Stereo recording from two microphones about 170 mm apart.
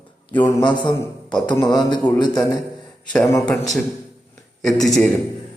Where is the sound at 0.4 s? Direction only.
25° left (ahead or behind).